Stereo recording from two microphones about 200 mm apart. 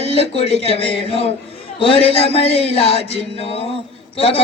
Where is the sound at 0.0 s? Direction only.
30° left (ahead or behind).